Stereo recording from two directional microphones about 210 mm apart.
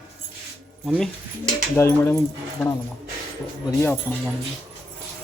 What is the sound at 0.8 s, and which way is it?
Speech, centre (ahead or behind).